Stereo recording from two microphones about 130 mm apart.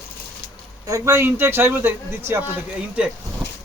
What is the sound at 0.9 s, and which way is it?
Speech, 20° right (ahead or behind).